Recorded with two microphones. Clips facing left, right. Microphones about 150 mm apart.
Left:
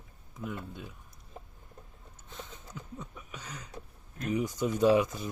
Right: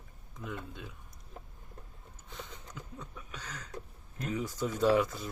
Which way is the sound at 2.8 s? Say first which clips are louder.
Left 3 dB; 5° left (ahead or behind).